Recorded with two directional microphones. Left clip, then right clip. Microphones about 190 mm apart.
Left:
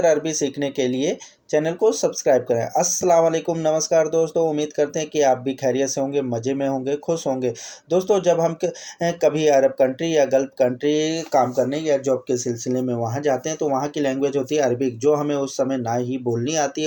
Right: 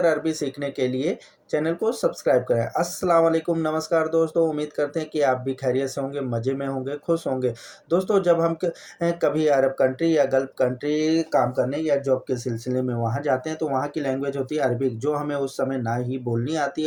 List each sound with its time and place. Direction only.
0.0 s speech: 25° left (ahead or behind)